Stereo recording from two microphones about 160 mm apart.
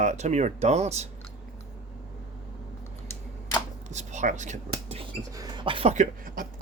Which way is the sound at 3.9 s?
45° right (ahead or behind).